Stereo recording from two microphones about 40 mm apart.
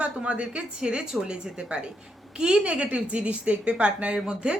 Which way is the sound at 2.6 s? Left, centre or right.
Right.